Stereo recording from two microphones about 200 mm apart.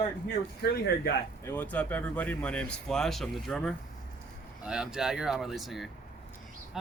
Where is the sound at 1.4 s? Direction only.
10° left (ahead or behind).